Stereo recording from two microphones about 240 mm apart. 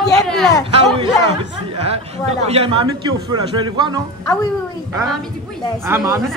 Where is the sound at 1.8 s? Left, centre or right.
Right.